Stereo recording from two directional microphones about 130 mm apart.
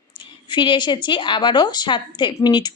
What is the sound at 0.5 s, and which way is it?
A woman's voice, 40° left (ahead or behind).